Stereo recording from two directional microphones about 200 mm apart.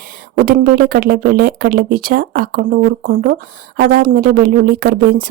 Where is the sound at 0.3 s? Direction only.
45° right (ahead or behind).